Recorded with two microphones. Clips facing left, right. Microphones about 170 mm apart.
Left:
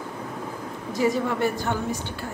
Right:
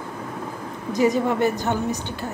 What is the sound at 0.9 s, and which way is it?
A woman's voice, 20° right (ahead or behind).